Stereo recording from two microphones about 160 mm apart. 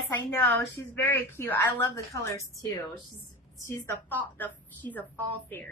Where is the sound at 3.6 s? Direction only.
15° left (ahead or behind).